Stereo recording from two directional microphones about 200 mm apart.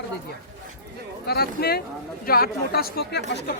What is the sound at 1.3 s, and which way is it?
Speech, 50° left (ahead or behind).